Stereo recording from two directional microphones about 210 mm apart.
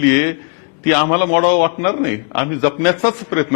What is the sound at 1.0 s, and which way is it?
Speech, 15° left (ahead or behind).